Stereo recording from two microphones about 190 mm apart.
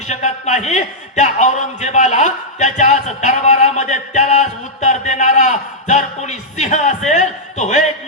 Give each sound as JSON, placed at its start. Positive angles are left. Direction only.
{"t": 0.1, "sound": "a man's voice", "side_deg": 35}